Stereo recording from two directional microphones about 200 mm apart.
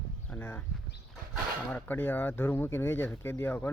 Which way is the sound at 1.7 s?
10° left (ahead or behind).